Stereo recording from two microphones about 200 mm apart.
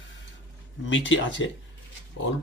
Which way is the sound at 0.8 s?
70° left (ahead or behind).